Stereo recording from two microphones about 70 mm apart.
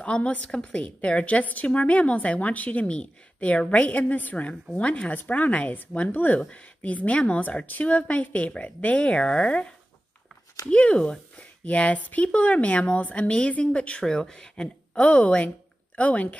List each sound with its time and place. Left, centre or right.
0.0 s a woman's voice: centre
10.7 s a woman's voice: centre